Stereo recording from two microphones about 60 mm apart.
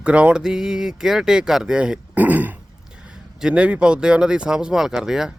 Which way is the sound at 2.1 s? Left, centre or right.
Right.